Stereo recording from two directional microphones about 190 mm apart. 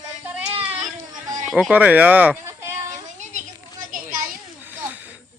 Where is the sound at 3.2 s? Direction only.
40° right (ahead or behind).